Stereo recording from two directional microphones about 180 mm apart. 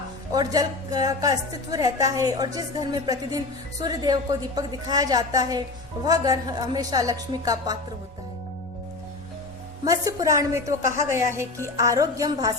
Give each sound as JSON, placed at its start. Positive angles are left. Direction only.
{"t": 0.3, "sound": "a woman's voice", "side_deg": -20}
{"t": 9.8, "sound": "a woman's voice", "side_deg": -20}